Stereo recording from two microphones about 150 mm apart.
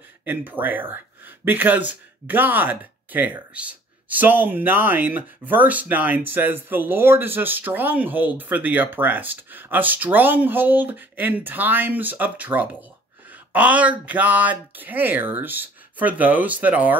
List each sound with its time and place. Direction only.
0.2 s speech: 10° right (ahead or behind)